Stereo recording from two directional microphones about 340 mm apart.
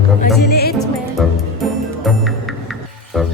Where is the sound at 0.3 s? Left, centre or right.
Left.